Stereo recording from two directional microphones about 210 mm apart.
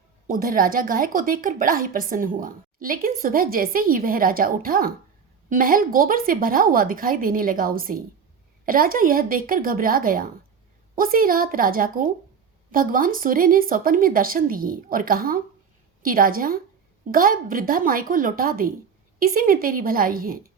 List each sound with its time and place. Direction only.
0.3 s a woman's voice: 40° right (ahead or behind)